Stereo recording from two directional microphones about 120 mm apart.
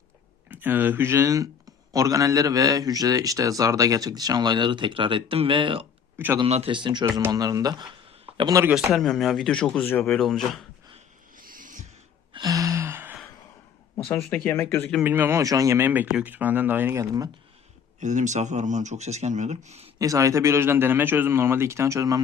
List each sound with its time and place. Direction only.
0.5 s a man's voice: 15° right (ahead or behind); by 5.8 s 45° right (ahead or behind)
6.1 s speech: 15° right (ahead or behind)
6.7 s a man's voice: 40° right (ahead or behind)
7.1 s a man's voice: 30° right (ahead or behind)
8.7 s speech: centre (ahead or behind)
12.3 s gasp: 30° right (ahead or behind)
14.3 s speech: 15° left (ahead or behind)
15.0 s speech: 15° right (ahead or behind)
18.0 s speech: 90° right; by 19.9 s 65° right (ahead or behind)
20.0 s speech: 25° right (ahead or behind)